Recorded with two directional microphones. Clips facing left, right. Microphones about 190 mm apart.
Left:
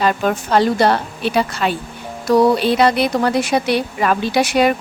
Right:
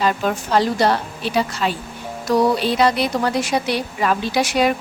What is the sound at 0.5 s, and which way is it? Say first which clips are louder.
A woman's voice: left 3 dB; 60° left (ahead or behind).